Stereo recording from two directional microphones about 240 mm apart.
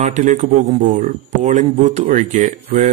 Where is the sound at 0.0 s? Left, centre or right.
Right.